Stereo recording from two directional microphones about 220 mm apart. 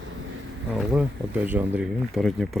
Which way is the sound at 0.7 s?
5° right (ahead or behind).